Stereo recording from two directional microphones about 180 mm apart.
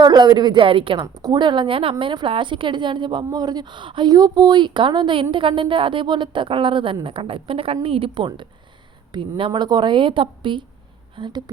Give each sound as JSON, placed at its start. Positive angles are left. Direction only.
{"t": 0.0, "sound": "a woman's voice", "side_deg": -25}